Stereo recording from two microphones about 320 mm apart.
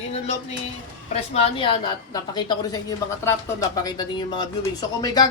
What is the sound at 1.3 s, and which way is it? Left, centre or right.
A woman's voice, centre.